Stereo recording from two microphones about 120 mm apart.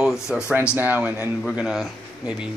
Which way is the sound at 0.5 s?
10° right (ahead or behind).